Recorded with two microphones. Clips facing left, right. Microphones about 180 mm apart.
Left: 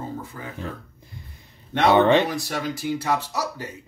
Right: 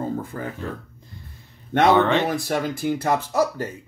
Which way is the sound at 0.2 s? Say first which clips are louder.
Right 6 dB; 55° right (ahead or behind).